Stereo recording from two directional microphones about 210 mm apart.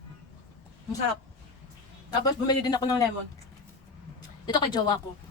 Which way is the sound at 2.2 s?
20° left (ahead or behind).